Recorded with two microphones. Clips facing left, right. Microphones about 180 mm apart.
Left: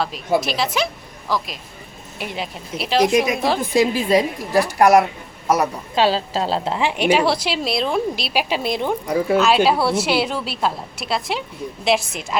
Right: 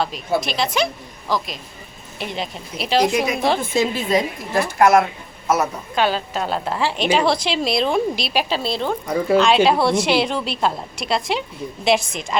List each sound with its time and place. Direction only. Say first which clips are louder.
0.3 s a woman's voice: even; 5° left (ahead or behind)
3.6 s a woman's voice: left 3 dB; 15° left (ahead or behind)
6.0 s a woman's voice: left 2 dB; 30° left (ahead or behind)
6.7 s a woman's voice: left 1 dB; 15° left (ahead or behind)
9.2 s a woman's voice: right 2 dB; centre (ahead or behind)